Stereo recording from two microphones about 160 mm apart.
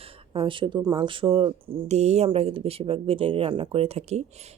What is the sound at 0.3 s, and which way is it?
Speech, 30° right (ahead or behind).